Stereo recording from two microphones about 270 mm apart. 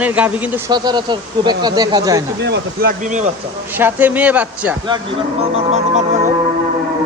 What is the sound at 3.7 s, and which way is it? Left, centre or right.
Speech, centre.